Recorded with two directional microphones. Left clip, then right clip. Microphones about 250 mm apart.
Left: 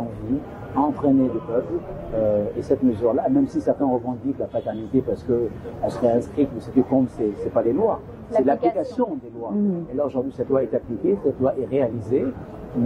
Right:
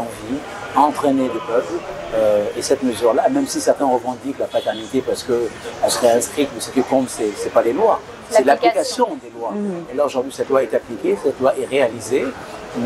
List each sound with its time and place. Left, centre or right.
0.3 s speech: centre
4.6 s speech: centre
9.0 s speech: right
9.9 s speech: centre